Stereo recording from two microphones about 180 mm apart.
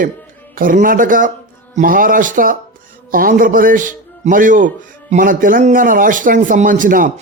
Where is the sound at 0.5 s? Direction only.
50° right (ahead or behind).